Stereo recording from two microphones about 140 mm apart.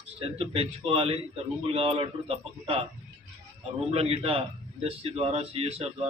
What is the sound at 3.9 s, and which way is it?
Speech, 45° right (ahead or behind).